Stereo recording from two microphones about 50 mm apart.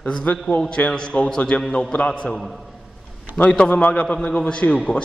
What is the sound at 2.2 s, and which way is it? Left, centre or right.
Speech, centre.